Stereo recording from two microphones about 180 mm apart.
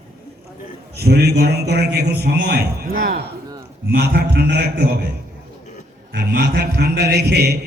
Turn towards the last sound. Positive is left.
turn(degrees=-65)  # may be behind; listen again after turning